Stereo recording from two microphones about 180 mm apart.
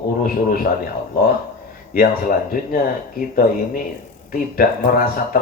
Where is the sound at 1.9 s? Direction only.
55° left (ahead or behind).